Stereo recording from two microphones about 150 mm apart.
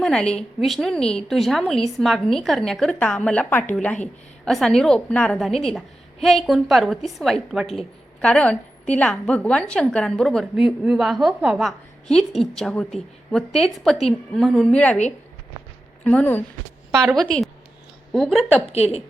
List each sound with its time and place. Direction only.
0.0 s a woman's voice: 5° left (ahead or behind)
12.0 s a woman's voice: 5° left (ahead or behind)
16.0 s a woman's voice: 10° left (ahead or behind)
18.6 s a woman's voice: 45° left (ahead or behind)